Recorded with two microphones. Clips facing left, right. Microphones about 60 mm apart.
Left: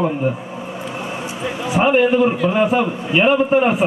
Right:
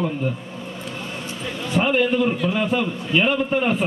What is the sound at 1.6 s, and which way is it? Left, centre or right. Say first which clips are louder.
A man's voice: left 5 dB; centre.